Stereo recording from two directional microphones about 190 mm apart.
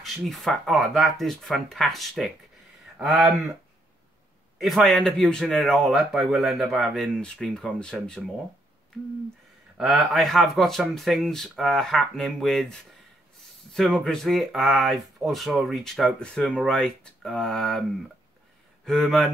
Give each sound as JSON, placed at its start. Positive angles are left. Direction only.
{"t": 0.0, "sound": "speech", "side_deg": 0}
{"t": 4.6, "sound": "speech", "side_deg": 0}
{"t": 9.8, "sound": "speech", "side_deg": 0}
{"t": 18.9, "sound": "speech", "side_deg": 0}